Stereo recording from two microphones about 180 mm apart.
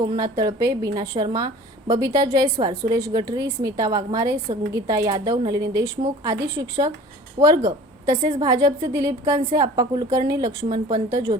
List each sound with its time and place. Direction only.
0.0 s a woman's voice: 20° right (ahead or behind)